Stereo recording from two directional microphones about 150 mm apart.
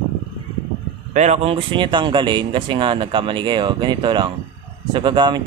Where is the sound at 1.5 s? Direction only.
35° right (ahead or behind).